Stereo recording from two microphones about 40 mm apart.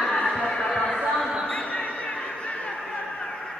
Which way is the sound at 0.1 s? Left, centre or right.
Left.